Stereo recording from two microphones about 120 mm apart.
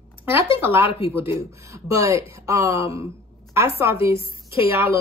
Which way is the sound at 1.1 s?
25° right (ahead or behind).